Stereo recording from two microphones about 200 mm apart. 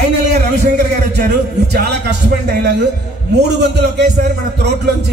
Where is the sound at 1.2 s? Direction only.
55° right (ahead or behind).